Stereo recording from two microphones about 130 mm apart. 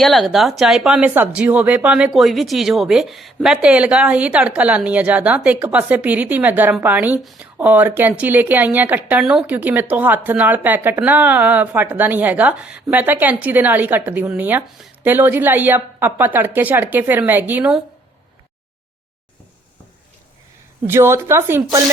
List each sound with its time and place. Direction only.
0.0 s speech: centre (ahead or behind)
20.8 s speech: 20° right (ahead or behind)